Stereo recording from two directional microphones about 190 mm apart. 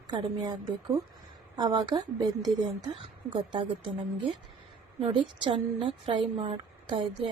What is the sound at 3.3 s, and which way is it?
Speech, 25° right (ahead or behind).